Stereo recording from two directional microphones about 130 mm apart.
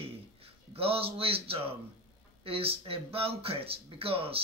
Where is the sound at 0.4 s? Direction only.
45° right (ahead or behind).